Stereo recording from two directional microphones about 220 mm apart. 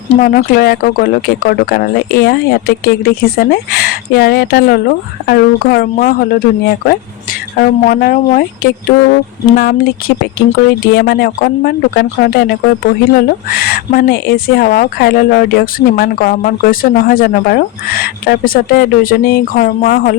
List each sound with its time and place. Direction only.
0.1 s speech: 40° left (ahead or behind)
10.9 s speech: 45° left (ahead or behind)